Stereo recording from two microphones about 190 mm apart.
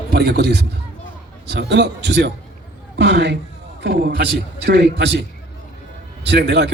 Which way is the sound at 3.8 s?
50° right (ahead or behind).